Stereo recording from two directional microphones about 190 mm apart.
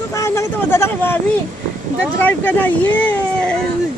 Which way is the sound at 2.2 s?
10° left (ahead or behind).